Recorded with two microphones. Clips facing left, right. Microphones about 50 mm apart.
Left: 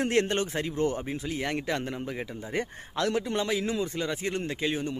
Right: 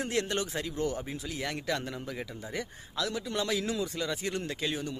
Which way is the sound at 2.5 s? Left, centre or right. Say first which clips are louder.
Left 5 dB; left.